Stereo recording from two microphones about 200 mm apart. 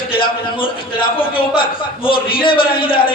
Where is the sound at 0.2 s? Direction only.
25° left (ahead or behind).